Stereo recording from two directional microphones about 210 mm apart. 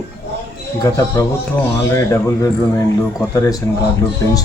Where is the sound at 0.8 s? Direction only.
15° left (ahead or behind).